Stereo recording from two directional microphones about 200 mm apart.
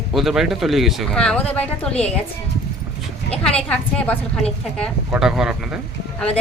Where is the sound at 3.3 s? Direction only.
5° left (ahead or behind).